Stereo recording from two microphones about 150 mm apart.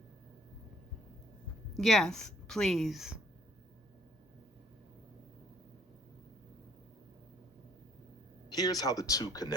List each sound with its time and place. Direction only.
1.7 s a woman's voice: centre (ahead or behind)
8.5 s speech: 25° left (ahead or behind)